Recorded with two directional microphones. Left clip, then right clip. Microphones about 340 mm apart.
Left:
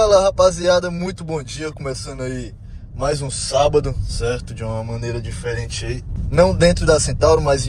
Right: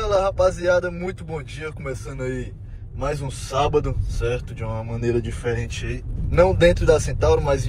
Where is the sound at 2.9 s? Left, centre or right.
Centre.